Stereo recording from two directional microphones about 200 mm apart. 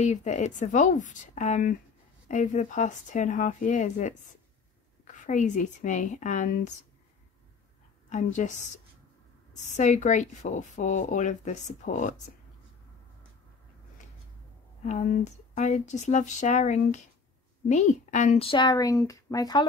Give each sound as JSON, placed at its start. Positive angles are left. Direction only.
{"t": 0.0, "sound": "a woman's voice", "side_deg": 35}
{"t": 8.1, "sound": "a woman's voice", "side_deg": 35}
{"t": 9.7, "sound": "a woman's voice", "side_deg": 35}
{"t": 14.9, "sound": "a woman's voice", "side_deg": 35}